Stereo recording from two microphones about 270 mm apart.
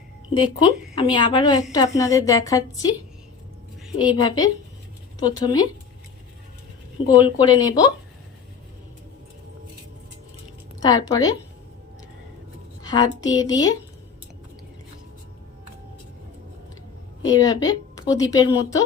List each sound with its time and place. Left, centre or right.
0.3 s a woman's voice: centre
3.9 s a woman's voice: centre
7.2 s a woman's voice: centre
10.8 s speech: centre
12.8 s a woman's voice: centre
17.2 s a woman's voice: centre